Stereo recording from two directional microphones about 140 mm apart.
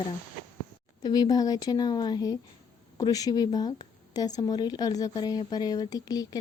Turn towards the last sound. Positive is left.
turn(degrees=25)  # may be behind; listen again after turning